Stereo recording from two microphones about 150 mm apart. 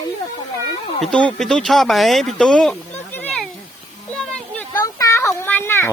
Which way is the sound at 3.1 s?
10° left (ahead or behind).